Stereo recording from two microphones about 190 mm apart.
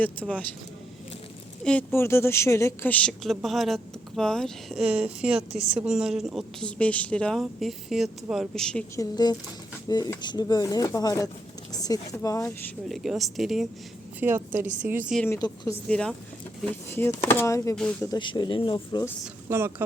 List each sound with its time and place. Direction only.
0.0 s speech: 5° left (ahead or behind)
1.6 s a woman's voice: 10° left (ahead or behind)
9.0 s speech: 20° left (ahead or behind)
12.9 s a woman's voice: centre (ahead or behind)
14.2 s a woman's voice: 10° right (ahead or behind)
15.3 s speech: 20° left (ahead or behind)
15.9 s a woman's voice: 5° left (ahead or behind); by 19.0 s 25° left (ahead or behind)
19.5 s a woman's voice: 15° right (ahead or behind)